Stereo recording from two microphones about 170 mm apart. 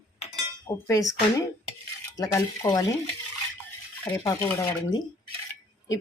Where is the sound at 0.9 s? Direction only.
20° left (ahead or behind).